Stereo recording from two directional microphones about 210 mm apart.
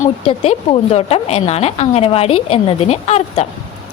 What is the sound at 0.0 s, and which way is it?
A woman's voice, 30° left (ahead or behind).